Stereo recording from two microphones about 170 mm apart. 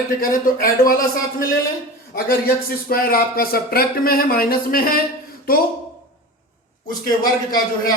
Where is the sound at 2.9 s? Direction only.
60° left (ahead or behind).